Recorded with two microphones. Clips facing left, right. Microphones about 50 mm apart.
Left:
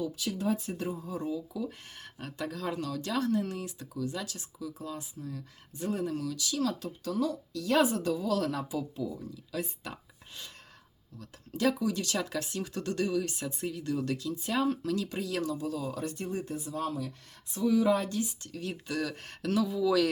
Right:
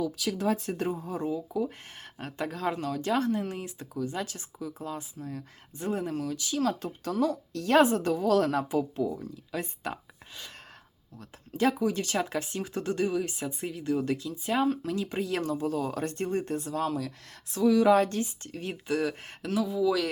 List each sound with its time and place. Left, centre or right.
0.0 s speech: right
1.1 s speech: right
11.2 s speech: right
18.2 s speech: right
18.7 s speech: right
19.4 s speech: centre